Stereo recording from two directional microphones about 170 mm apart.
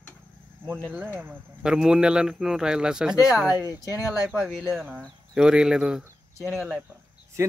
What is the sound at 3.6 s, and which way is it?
Speech, 20° left (ahead or behind).